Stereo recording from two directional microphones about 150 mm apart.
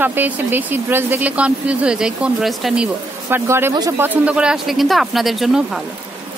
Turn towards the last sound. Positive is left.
turn(degrees=0)  # may be behind; listen again after turning